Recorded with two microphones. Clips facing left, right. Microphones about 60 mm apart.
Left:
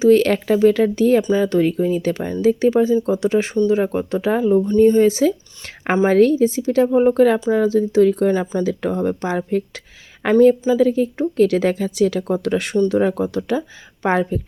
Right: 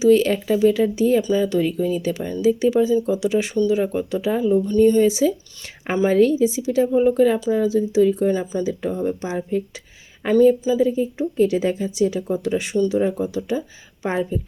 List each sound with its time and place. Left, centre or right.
0.0 s speech: left
1.2 s speech: left
4.6 s a woman's voice: left
10.3 s a woman's voice: left